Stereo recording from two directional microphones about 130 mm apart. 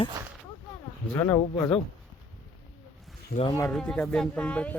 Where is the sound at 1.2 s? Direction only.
20° left (ahead or behind).